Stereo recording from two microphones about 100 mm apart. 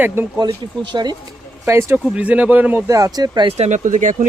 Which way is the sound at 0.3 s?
45° right (ahead or behind).